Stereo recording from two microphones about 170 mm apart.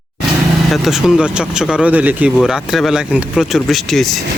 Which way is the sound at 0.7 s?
Centre (ahead or behind).